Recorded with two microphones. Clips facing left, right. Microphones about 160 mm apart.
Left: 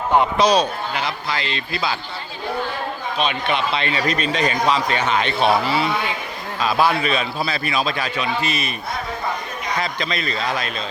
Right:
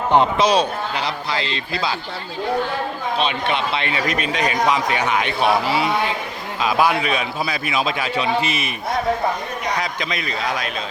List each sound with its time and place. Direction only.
0.1 s speech: 25° right (ahead or behind)
3.2 s speech: 30° right (ahead or behind)
3.8 s speech: 20° right (ahead or behind)
9.8 s speech: 15° right (ahead or behind)